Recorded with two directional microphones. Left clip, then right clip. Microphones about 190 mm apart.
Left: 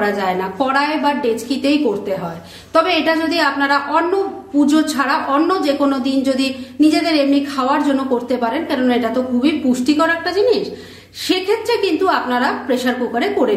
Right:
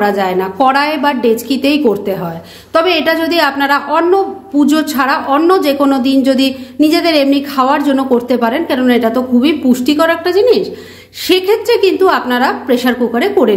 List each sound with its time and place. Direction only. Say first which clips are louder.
0.0 s a woman's voice: right 5 dB; 35° right (ahead or behind)